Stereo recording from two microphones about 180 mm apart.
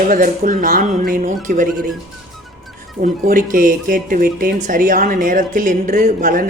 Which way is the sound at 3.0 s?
50° right (ahead or behind).